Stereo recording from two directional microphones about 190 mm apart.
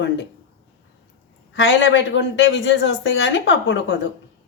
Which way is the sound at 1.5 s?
75° left (ahead or behind).